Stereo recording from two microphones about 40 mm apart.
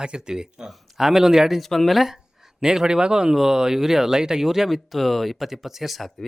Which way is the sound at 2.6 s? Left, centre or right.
Centre.